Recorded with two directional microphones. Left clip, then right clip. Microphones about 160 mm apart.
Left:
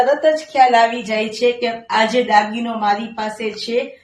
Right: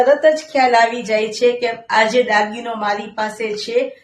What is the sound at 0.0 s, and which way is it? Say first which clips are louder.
Speech: right 2 dB; 35° right (ahead or behind).